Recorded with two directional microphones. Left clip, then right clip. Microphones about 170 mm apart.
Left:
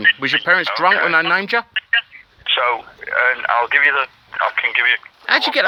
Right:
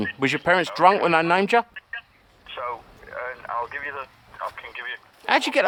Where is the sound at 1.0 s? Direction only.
15° right (ahead or behind).